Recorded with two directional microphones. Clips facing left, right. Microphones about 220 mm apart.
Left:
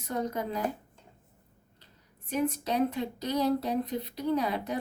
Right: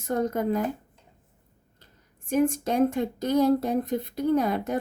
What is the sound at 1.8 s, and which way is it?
Speech, 50° right (ahead or behind).